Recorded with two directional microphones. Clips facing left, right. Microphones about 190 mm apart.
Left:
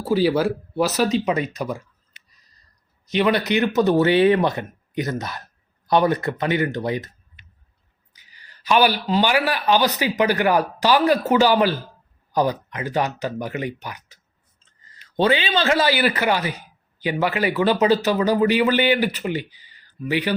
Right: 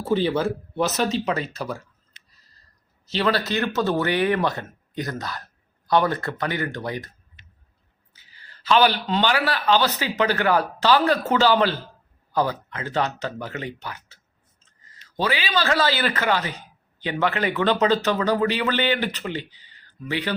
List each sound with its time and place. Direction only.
0.0 s speech: 5° left (ahead or behind)
3.1 s speech: 15° left (ahead or behind)
8.1 s speech: 15° left (ahead or behind)
15.1 s speech: 30° left (ahead or behind); by 20.3 s 10° left (ahead or behind)